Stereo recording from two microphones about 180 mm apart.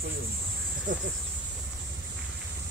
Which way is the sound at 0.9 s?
45° right (ahead or behind).